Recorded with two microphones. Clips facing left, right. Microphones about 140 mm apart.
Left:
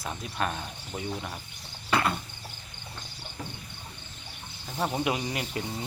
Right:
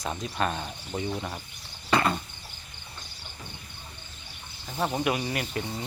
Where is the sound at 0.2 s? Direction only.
Centre (ahead or behind).